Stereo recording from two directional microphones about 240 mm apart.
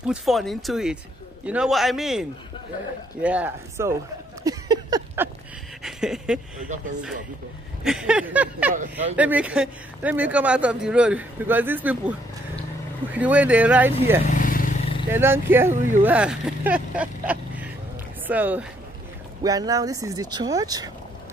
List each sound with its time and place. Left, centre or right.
0.1 s speech: centre
4.4 s a sound: centre
5.8 s a sound: centre
7.8 s speech: centre
13.1 s speech: centre
14.2 s vehicle: left
15.0 s speech: centre